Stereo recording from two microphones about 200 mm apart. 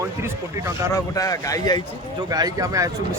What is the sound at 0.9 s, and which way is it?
Speech, 15° left (ahead or behind).